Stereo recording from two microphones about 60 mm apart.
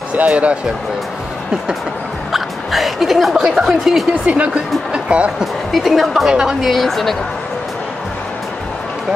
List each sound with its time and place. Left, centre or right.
0.2 s speech: right
2.3 s speech: centre
4.1 s speech: right
5.4 s a woman's voice: centre
6.7 s a woman's voice: centre